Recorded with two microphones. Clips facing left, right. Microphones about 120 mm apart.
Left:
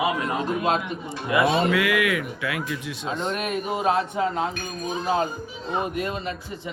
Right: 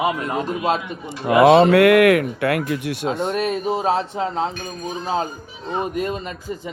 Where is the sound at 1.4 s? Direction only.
70° right (ahead or behind).